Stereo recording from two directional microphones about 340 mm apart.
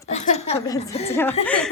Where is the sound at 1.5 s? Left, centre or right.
Centre.